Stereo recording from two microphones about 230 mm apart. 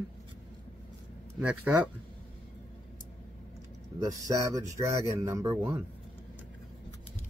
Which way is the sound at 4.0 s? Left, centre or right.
Centre.